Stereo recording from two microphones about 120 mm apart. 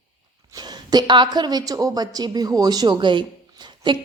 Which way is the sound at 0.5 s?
35° right (ahead or behind).